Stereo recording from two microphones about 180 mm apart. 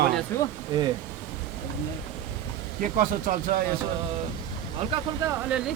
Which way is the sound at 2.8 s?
50° right (ahead or behind).